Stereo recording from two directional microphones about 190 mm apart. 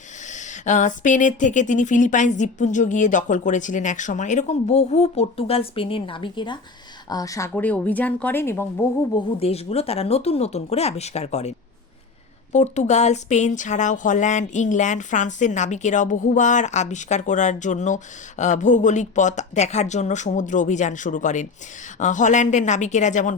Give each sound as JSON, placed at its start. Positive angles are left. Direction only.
{"t": 0.3, "sound": "speech", "side_deg": 40}
{"t": 9.4, "sound": "speech", "side_deg": 30}
{"t": 12.5, "sound": "speech", "side_deg": 35}